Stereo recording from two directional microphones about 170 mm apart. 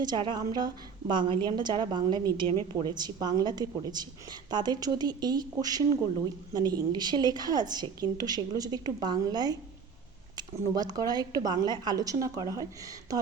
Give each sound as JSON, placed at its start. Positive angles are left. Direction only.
{"t": 0.0, "sound": "a woman's voice", "side_deg": -25}
{"t": 10.8, "sound": "a woman's voice", "side_deg": -20}